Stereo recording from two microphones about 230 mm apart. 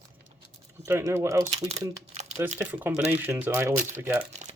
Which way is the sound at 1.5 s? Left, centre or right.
Right.